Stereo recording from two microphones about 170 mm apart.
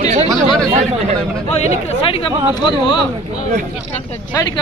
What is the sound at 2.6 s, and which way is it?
Speech, 25° left (ahead or behind).